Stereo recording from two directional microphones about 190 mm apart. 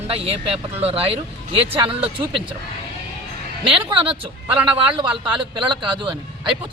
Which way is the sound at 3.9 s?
25° right (ahead or behind).